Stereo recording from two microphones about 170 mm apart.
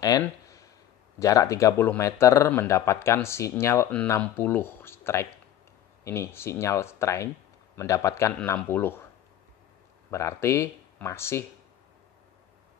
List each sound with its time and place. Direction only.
1.2 s speech: 20° left (ahead or behind)
10.1 s speech: 15° left (ahead or behind)